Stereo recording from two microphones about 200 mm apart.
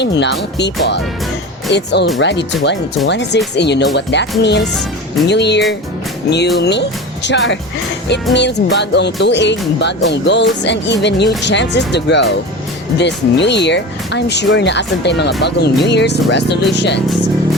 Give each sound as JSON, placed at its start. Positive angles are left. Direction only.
{"t": 0.0, "sound": "speech", "side_deg": 60}